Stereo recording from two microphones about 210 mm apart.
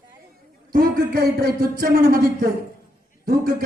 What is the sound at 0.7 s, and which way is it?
A man's voice, 45° right (ahead or behind).